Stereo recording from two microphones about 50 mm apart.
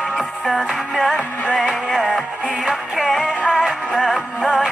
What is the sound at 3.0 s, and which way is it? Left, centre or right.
Music, centre.